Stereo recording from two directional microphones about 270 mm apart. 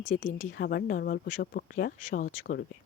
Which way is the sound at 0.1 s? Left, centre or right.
Left.